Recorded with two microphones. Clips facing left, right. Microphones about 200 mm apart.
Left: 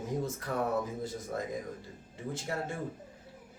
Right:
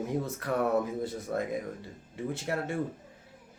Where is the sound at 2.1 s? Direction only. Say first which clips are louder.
Right 4 dB; 60° right (ahead or behind).